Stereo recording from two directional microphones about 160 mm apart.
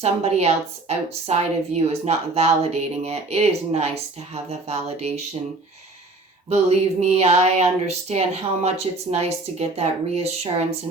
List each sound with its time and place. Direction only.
0.0 s a woman's voice: 40° right (ahead or behind)
6.5 s a woman's voice: 40° right (ahead or behind)